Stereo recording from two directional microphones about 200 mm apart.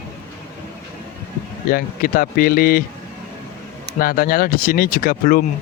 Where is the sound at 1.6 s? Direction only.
45° left (ahead or behind).